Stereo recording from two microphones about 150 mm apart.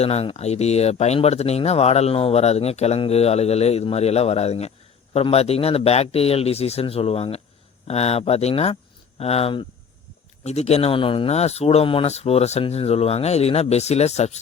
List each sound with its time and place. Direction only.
0.0 s speech: 45° left (ahead or behind)